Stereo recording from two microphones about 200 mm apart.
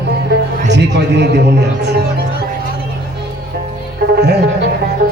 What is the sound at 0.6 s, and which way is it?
Speech, 60° right (ahead or behind).